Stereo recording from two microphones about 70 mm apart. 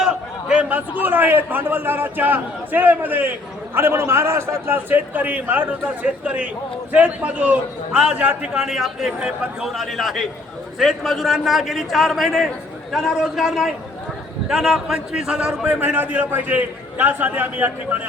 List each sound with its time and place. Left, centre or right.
0.0 s a sound: centre
0.7 s a man's voice: right
9.6 s a man's voice: centre
15.6 s a man's voice: right